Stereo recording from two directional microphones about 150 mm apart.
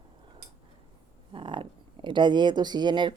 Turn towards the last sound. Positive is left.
turn(degrees=-30)  # may be behind; listen again after turning